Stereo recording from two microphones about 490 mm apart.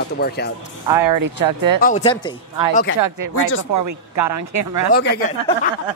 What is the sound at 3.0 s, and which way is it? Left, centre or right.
Speech, right.